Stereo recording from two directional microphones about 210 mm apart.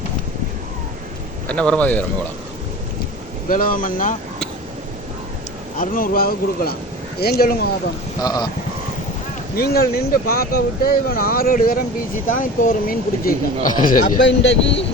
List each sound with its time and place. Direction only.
1.5 s speech: 5° left (ahead or behind)
3.5 s speech: 40° left (ahead or behind)
5.7 s speech: 40° left (ahead or behind)
8.2 s speech: 20° left (ahead or behind)
9.6 s speech: 45° left (ahead or behind)
14.2 s speech: 60° left (ahead or behind)